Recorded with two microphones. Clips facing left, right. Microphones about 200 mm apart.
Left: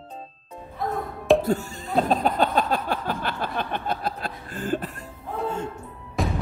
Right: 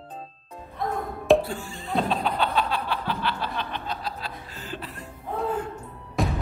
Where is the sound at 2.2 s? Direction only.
45° left (ahead or behind).